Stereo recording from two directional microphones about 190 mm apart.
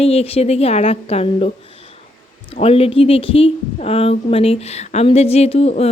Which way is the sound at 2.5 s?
30° left (ahead or behind).